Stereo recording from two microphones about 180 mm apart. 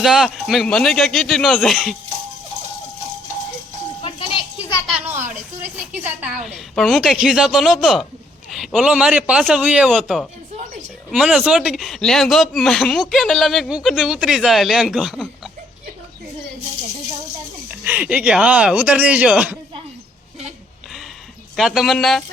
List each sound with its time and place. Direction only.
0.0 s speech: centre (ahead or behind)
4.0 s music: 30° left (ahead or behind)
5.0 s a woman's voice: 10° right (ahead or behind)
17.7 s speech: 10° right (ahead or behind)
21.5 s speech: centre (ahead or behind)